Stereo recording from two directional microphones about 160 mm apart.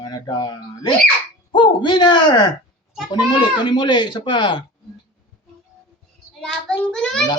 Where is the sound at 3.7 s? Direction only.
30° left (ahead or behind).